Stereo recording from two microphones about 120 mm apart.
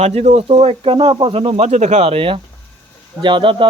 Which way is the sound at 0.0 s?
65° right (ahead or behind).